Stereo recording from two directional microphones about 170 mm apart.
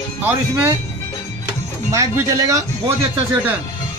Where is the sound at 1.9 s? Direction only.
20° right (ahead or behind).